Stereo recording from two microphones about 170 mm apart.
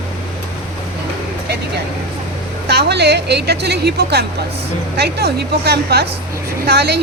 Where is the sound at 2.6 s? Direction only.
75° right (ahead or behind).